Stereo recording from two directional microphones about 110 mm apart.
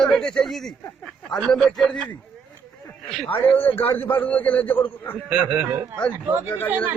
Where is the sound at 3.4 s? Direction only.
15° left (ahead or behind).